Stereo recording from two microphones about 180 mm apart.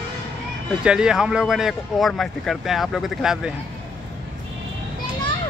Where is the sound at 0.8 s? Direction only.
5° right (ahead or behind).